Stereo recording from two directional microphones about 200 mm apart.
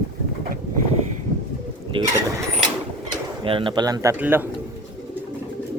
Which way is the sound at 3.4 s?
25° right (ahead or behind).